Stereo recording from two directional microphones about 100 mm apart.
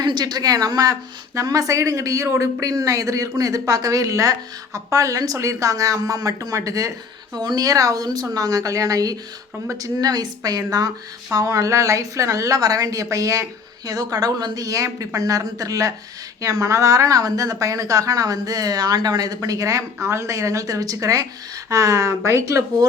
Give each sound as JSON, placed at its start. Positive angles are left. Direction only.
{"t": 0.0, "sound": "speech", "side_deg": -45}